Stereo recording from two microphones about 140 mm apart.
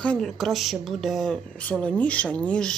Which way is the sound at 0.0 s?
5° left (ahead or behind).